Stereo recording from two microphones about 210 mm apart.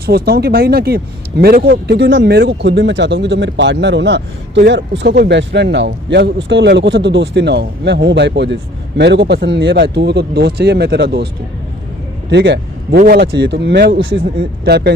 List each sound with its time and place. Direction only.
0.0 s speech: 50° right (ahead or behind)
12.3 s speech: 55° right (ahead or behind)